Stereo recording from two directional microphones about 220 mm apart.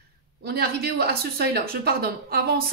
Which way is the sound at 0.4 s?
45° right (ahead or behind).